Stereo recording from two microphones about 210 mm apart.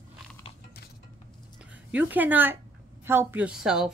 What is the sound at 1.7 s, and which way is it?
A woman's voice, 5° right (ahead or behind).